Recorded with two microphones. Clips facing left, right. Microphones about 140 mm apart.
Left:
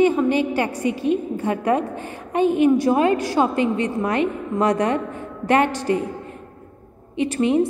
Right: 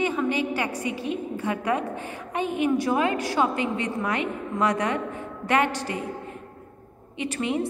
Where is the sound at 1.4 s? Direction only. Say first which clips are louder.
Left 5 dB; 40° left (ahead or behind).